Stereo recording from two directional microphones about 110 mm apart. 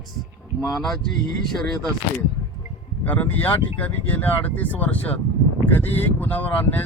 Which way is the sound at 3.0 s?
15° left (ahead or behind).